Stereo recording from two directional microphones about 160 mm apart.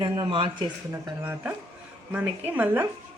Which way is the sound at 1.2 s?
10° right (ahead or behind).